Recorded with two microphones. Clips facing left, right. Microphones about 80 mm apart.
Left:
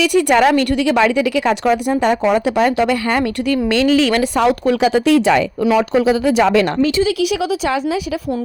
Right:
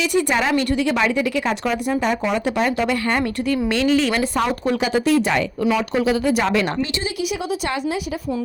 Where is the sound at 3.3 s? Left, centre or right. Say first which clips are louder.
Left 4 dB; left.